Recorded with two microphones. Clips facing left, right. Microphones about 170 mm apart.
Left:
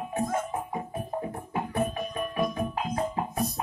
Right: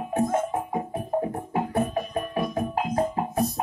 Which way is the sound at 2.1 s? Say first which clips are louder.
Right 1 dB; 45° right (ahead or behind).